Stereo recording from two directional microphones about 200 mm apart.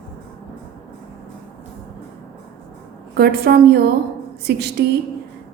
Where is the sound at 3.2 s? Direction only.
50° right (ahead or behind).